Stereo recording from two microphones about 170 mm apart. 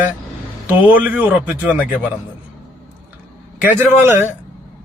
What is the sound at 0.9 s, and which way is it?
Speech, 10° right (ahead or behind).